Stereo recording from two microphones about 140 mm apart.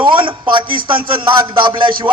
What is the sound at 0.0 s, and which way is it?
A man's voice, 35° right (ahead or behind).